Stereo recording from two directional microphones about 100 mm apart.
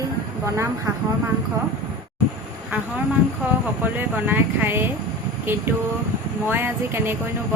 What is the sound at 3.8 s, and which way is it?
Speech, 20° right (ahead or behind).